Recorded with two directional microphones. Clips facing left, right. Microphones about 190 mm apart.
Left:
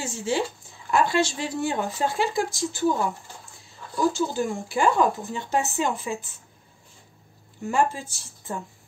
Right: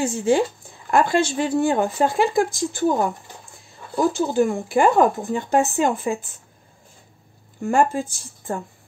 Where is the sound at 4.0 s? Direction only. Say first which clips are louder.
Right 5 dB; 60° right (ahead or behind).